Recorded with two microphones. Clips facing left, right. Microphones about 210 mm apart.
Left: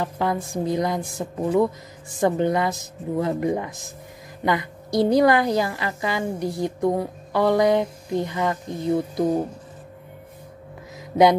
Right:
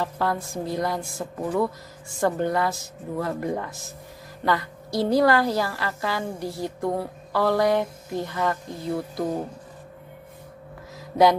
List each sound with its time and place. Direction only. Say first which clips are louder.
0.0 s a woman's voice: left 2 dB; 15° left (ahead or behind)
11.0 s music: left 2 dB; 20° left (ahead or behind)